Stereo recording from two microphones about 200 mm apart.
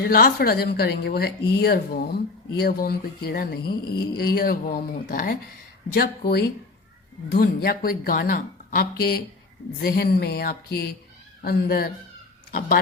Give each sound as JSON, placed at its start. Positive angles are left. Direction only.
{"t": 0.0, "sound": "a woman's voice", "side_deg": 50}